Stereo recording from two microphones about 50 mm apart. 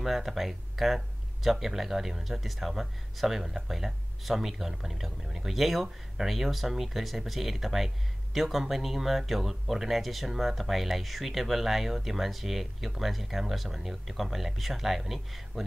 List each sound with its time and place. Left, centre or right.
0.0 s speech: centre